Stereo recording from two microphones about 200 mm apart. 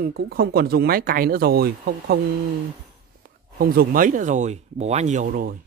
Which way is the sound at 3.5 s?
45° right (ahead or behind).